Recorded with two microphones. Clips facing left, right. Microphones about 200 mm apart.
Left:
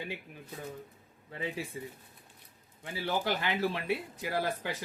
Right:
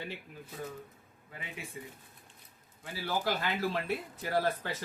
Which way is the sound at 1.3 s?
30° left (ahead or behind).